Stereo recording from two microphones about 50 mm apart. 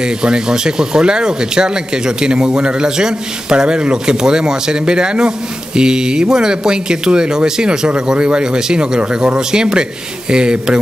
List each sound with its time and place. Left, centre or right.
0.0 s speech: centre